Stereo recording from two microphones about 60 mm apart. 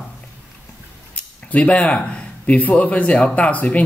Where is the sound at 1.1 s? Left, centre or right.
Left.